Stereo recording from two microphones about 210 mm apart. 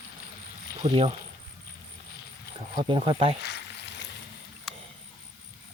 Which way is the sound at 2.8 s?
25° right (ahead or behind).